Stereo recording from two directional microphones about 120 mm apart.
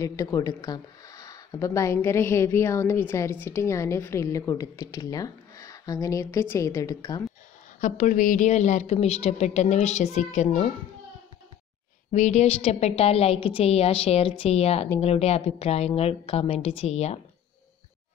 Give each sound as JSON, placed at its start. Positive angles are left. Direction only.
{"t": 0.0, "sound": "speech", "side_deg": 30}
{"t": 7.8, "sound": "a woman's voice", "side_deg": 90}
{"t": 12.1, "sound": "a woman's voice", "side_deg": 75}